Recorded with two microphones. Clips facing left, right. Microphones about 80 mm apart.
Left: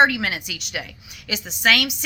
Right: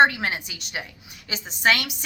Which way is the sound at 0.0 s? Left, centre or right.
Right.